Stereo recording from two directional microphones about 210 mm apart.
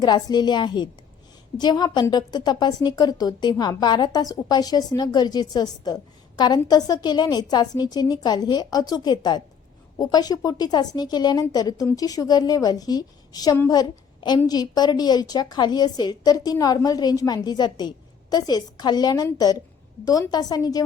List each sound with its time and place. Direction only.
0.0 s a woman's voice: 20° left (ahead or behind)